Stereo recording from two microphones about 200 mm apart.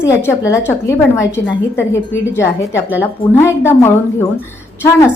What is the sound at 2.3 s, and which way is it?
A woman's voice, 10° left (ahead or behind).